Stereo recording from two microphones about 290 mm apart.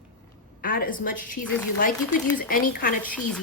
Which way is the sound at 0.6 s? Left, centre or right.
Left.